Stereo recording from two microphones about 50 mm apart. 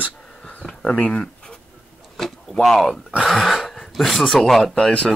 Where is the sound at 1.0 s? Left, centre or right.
Centre.